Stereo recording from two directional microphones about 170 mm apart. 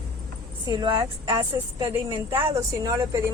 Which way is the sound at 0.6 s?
25° right (ahead or behind).